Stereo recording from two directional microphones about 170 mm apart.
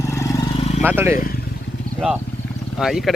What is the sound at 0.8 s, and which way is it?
Speech, 10° right (ahead or behind).